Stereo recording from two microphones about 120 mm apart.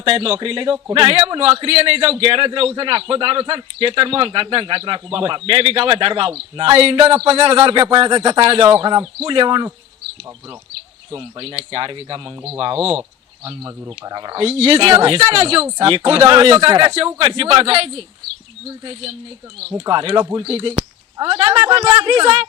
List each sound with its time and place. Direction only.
0.0 s a man's voice: 50° right (ahead or behind)
11.1 s a man's voice: 50° right (ahead or behind)
12.7 s speech: 10° right (ahead or behind)
13.8 s speech: 30° right (ahead or behind)
14.3 s a man's voice: 55° right (ahead or behind)
19.9 s speech: 40° right (ahead or behind)
20.4 s a man's voice: 55° right (ahead or behind)